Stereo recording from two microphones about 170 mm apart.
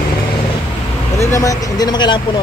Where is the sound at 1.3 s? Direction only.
20° left (ahead or behind).